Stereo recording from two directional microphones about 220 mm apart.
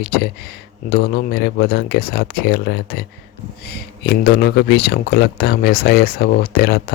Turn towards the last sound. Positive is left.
turn(degrees=45)  # may be behind; listen again after turning